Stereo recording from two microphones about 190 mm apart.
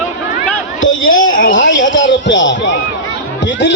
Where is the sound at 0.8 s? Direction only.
90° left.